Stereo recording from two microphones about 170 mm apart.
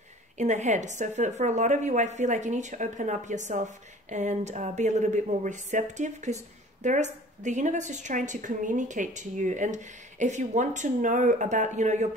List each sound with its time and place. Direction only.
0.4 s a woman's voice: 45° right (ahead or behind)